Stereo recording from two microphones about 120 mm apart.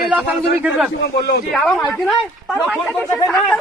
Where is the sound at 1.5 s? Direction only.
5° left (ahead or behind).